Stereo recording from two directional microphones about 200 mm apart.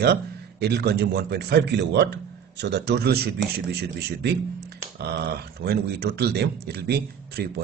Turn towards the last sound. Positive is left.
turn(degrees=-50)  # may be behind; listen again after turning